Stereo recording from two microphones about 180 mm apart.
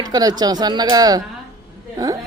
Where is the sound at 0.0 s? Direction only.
20° right (ahead or behind).